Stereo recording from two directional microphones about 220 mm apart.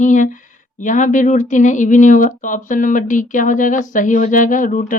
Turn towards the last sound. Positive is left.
turn(degrees=35)  # may be behind; listen again after turning